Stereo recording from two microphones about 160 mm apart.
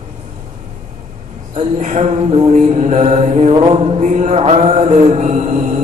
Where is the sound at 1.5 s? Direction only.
45° right (ahead or behind).